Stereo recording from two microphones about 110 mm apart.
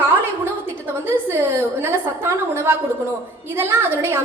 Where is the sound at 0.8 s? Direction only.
20° right (ahead or behind).